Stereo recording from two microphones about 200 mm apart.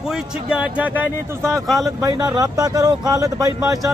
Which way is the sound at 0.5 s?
5° right (ahead or behind).